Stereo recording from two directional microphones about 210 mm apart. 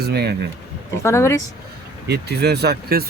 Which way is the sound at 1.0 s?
15° left (ahead or behind).